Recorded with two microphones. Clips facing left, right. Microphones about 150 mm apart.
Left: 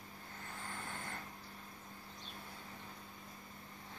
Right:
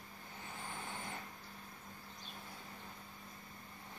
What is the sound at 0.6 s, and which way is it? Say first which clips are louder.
Vehicle: right 1 dB; 15° right (ahead or behind).